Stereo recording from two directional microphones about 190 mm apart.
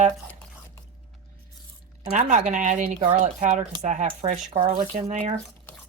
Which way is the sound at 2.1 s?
40° right (ahead or behind).